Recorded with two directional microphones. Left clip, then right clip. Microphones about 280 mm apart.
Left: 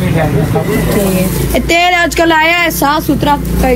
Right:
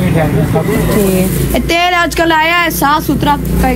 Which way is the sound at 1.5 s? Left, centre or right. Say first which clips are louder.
Left 2 dB; centre.